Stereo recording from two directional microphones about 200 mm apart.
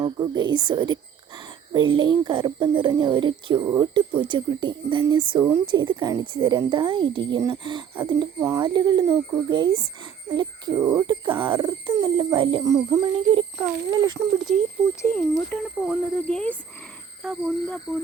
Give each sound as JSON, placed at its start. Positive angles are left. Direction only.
{"t": 0.0, "sound": "a woman's voice", "side_deg": -20}
{"t": 8.4, "sound": "a woman's voice", "side_deg": -15}
{"t": 15.4, "sound": "speech", "side_deg": 0}